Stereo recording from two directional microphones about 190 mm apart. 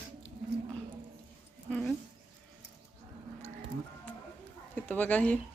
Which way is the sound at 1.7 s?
5° left (ahead or behind).